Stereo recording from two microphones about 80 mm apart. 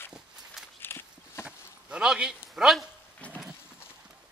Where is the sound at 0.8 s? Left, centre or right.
Left.